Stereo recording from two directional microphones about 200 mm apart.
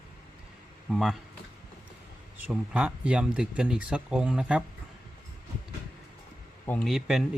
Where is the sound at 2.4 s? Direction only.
5° right (ahead or behind).